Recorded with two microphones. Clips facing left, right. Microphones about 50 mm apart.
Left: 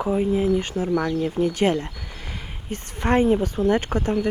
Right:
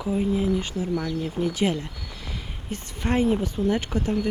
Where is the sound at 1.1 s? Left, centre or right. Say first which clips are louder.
Left 4 dB; left.